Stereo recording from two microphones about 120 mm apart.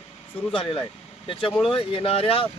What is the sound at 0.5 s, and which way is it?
Speech, 50° left (ahead or behind).